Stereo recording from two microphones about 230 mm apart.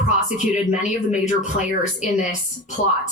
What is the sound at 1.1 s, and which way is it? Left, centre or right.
Speech, left.